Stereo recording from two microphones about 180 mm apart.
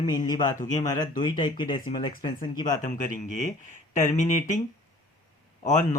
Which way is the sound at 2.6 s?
45° left (ahead or behind).